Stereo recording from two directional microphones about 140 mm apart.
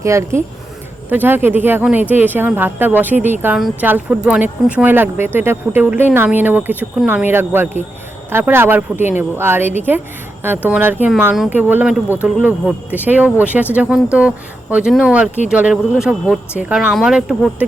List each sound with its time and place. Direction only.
0.0 s speech: 20° right (ahead or behind); by 17.7 s 5° right (ahead or behind)